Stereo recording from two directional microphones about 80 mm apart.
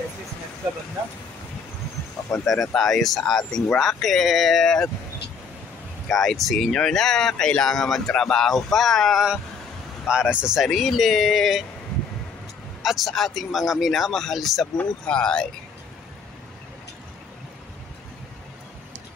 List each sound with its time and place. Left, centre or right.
2.3 s speech: centre
6.0 s speech: centre
10.0 s speech: centre
12.8 s speech: centre
14.8 s speech: centre